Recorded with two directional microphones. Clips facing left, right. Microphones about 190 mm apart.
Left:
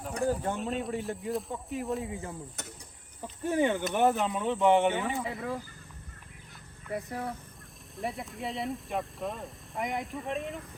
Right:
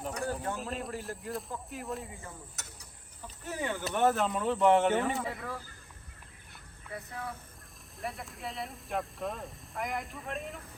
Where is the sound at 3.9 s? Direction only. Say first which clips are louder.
Right 2 dB; centre (ahead or behind).